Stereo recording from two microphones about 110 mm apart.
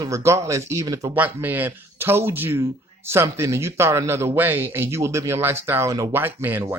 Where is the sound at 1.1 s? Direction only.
15° right (ahead or behind).